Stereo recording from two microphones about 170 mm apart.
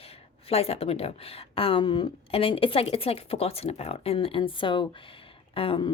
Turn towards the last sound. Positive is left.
turn(degrees=30)  # may be behind; listen again after turning